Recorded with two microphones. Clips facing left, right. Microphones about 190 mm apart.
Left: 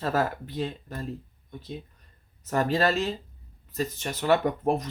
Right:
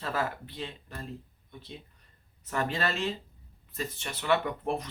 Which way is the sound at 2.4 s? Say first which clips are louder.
Left 7 dB; 40° left (ahead or behind).